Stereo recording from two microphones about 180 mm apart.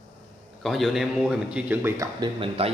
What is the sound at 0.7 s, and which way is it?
Speech, centre (ahead or behind).